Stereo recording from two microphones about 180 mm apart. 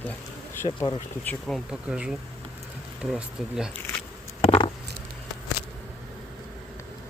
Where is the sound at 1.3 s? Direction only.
Centre (ahead or behind).